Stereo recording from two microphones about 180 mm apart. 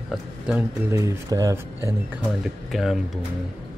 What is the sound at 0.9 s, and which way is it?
Speech, 15° right (ahead or behind).